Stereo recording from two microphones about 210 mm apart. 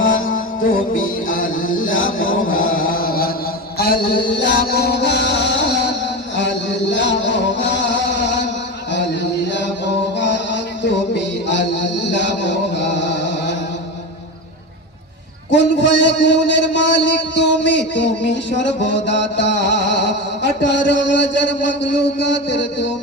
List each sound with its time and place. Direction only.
0.0 s music: 70° left (ahead or behind)
1.3 s music: 40° left (ahead or behind)
2.5 s chant: 40° left (ahead or behind)
4.4 s music: 55° left (ahead or behind)
10.2 s music: 55° left (ahead or behind)
11.4 s a sound: 55° left (ahead or behind)
15.4 s a man's voice: 60° left (ahead or behind)
18.5 s music: 55° left (ahead or behind)